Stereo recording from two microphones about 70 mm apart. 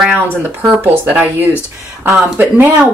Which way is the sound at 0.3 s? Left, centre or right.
Right.